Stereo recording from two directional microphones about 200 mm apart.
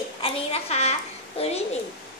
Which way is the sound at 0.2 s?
30° left (ahead or behind).